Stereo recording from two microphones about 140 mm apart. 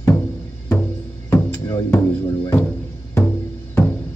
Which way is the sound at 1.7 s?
30° left (ahead or behind).